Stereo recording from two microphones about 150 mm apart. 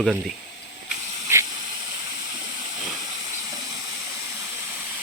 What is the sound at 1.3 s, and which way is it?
Hiss, 15° right (ahead or behind).